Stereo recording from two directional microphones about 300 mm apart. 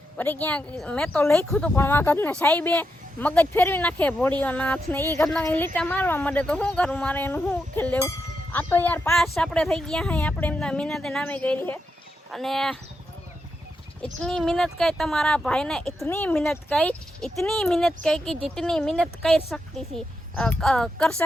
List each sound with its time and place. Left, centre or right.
0.2 s speech: centre
14.0 s speech: centre